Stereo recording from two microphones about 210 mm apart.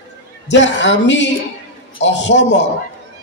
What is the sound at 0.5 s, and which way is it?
A man's voice, 60° left (ahead or behind).